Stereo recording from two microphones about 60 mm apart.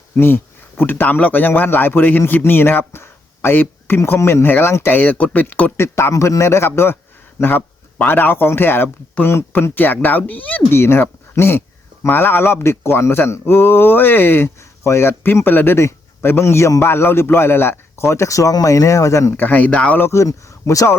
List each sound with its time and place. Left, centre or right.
0.2 s speech: left
4.4 s speech: left
5.7 s speech: left
10.7 s speech: left
18.1 s speech: left
19.4 s speech: left
20.1 s speech: left